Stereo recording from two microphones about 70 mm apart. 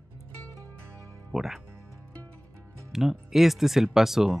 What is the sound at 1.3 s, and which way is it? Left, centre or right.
Speech, centre.